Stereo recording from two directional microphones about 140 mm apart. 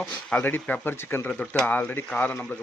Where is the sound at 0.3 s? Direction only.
10° left (ahead or behind).